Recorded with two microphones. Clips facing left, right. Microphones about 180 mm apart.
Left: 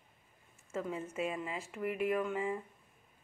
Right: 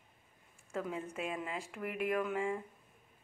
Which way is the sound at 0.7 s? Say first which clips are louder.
Left 1 dB; centre (ahead or behind).